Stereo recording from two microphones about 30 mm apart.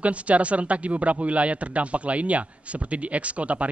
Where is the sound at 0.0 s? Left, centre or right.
Right.